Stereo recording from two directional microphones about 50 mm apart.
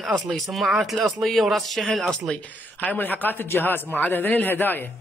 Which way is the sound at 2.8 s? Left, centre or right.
Left.